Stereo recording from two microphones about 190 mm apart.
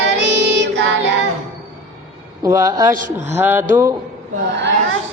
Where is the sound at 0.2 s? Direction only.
65° right (ahead or behind).